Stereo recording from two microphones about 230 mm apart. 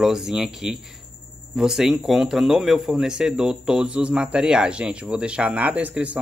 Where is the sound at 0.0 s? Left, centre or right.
Centre.